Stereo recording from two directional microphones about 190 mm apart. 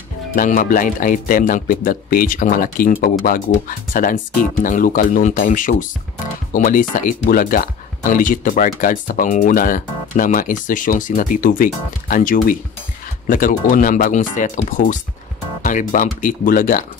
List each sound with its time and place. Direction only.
0.4 s speech: 45° left (ahead or behind)